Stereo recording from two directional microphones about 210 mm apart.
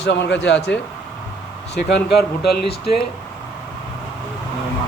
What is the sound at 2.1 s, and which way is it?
Speech, 50° left (ahead or behind).